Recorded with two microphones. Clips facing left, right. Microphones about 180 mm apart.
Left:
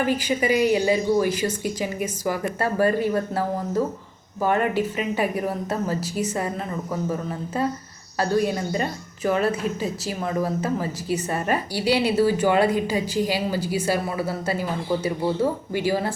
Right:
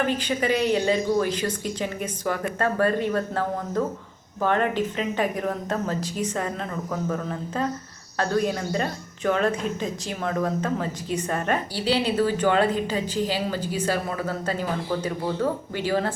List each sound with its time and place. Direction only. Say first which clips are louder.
0.0 s speech: left 2 dB; 10° left (ahead or behind)